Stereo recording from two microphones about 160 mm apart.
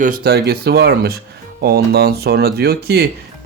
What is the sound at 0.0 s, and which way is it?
Speech, 70° right (ahead or behind).